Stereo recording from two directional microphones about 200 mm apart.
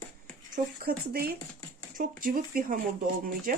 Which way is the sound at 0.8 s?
50° right (ahead or behind).